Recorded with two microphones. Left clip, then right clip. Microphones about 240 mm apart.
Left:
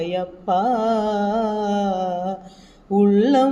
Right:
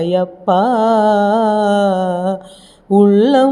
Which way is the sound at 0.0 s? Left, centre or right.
Right.